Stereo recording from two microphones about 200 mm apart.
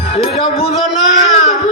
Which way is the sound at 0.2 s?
30° left (ahead or behind).